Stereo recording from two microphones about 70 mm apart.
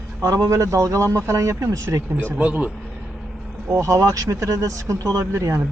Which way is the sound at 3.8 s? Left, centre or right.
Right.